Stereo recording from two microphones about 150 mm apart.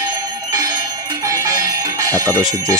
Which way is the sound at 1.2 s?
20° right (ahead or behind).